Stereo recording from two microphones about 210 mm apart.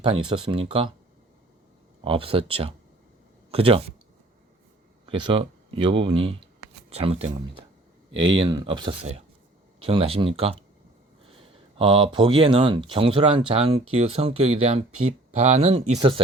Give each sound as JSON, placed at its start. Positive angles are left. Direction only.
{"t": 0.0, "sound": "speech", "side_deg": -20}
{"t": 2.0, "sound": "speech", "side_deg": -25}
{"t": 5.0, "sound": "speech", "side_deg": -25}
{"t": 11.8, "sound": "speech", "side_deg": -25}